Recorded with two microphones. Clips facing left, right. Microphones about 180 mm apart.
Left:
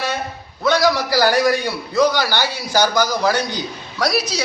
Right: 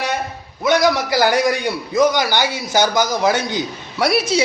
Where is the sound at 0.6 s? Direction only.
20° right (ahead or behind).